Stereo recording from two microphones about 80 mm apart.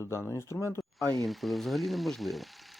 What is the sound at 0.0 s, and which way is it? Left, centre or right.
Speech, left.